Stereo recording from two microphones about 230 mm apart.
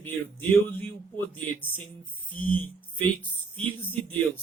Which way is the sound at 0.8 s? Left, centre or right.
Centre.